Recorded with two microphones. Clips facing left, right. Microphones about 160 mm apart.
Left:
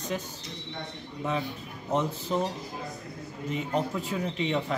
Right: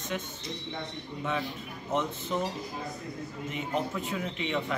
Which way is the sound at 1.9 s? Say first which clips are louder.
Left 2 dB; 35° left (ahead or behind).